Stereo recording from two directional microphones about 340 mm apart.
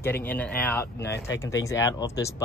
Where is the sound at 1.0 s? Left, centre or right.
Left.